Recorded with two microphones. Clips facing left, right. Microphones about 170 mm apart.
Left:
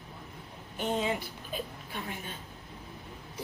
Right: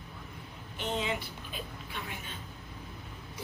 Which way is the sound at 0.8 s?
45° left (ahead or behind).